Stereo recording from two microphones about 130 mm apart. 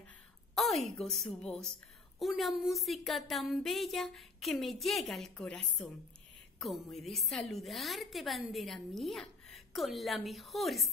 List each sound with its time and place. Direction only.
0.6 s a woman's voice: centre (ahead or behind)